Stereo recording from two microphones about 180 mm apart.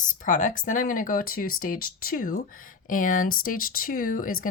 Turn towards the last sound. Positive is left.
turn(degrees=50)  # may be behind; listen again after turning